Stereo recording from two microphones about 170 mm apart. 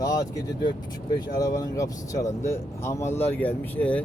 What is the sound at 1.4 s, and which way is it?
Speech, 20° left (ahead or behind).